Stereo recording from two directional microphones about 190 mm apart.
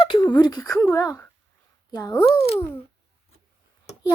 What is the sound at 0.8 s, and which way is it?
Speech, 10° left (ahead or behind).